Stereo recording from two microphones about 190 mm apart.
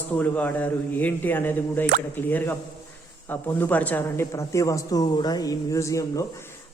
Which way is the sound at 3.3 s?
10° left (ahead or behind).